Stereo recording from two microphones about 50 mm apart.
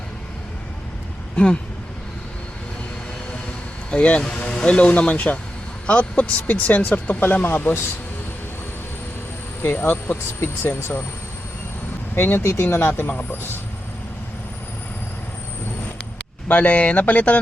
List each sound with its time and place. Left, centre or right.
3.9 s speech: left
9.6 s speech: left
12.1 s speech: left
16.5 s speech: left